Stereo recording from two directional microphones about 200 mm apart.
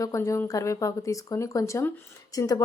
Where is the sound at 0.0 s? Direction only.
15° left (ahead or behind).